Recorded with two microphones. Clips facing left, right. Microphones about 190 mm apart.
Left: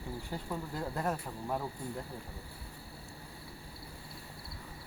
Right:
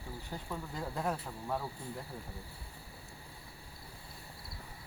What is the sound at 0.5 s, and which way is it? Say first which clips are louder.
Speech: left 2 dB; centre (ahead or behind).